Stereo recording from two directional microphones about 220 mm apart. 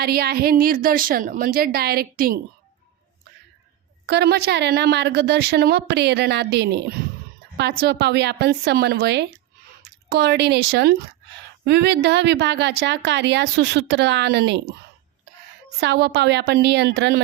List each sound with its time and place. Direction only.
0.0 s a woman's voice: 45° right (ahead or behind)
4.0 s a woman's voice: 50° right (ahead or behind)
15.8 s a woman's voice: 50° right (ahead or behind)